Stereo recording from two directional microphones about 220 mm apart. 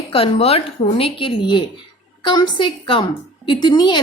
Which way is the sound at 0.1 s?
25° left (ahead or behind).